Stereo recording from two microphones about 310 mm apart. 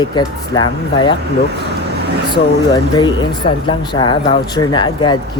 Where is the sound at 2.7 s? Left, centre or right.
Centre.